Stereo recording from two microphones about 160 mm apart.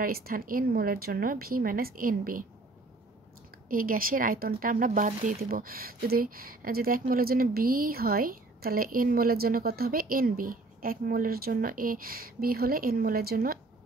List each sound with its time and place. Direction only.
0.0 s speech: 65° right (ahead or behind)
3.6 s speech: 60° right (ahead or behind)